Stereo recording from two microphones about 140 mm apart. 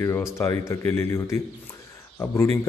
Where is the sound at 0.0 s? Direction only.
20° left (ahead or behind).